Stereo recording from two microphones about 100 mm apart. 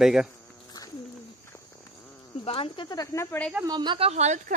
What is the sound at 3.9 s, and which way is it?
Speech, 85° right.